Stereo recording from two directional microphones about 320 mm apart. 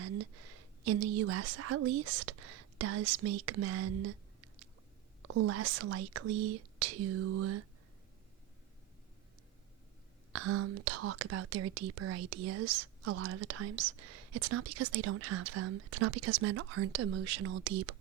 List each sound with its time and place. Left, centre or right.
0.0 s a woman's voice: right
5.2 s speech: right
10.3 s speech: right